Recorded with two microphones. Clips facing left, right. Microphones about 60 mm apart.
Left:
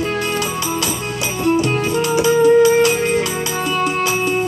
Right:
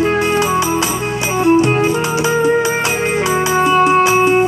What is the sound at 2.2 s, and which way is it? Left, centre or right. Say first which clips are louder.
Music: left 4 dB; right.